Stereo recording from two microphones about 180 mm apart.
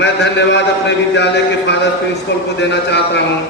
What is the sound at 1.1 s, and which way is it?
A man's voice, 75° left (ahead or behind).